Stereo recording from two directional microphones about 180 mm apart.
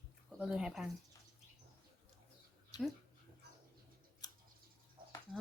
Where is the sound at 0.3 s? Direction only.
5° right (ahead or behind).